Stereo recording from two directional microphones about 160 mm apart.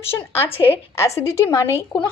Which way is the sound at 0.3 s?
15° left (ahead or behind).